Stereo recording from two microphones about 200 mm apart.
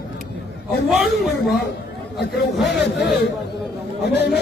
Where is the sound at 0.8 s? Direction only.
Centre (ahead or behind).